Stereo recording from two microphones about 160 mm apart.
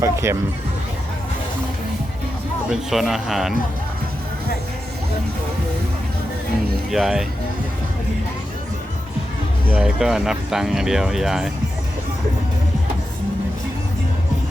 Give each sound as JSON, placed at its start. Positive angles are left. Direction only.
{"t": 0.0, "sound": "speech", "side_deg": -15}
{"t": 2.6, "sound": "speech", "side_deg": 0}
{"t": 6.9, "sound": "speech", "side_deg": 0}
{"t": 9.6, "sound": "speech", "side_deg": -5}